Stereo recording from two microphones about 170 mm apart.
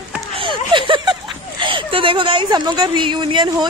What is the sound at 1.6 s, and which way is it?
A woman's voice, 30° right (ahead or behind).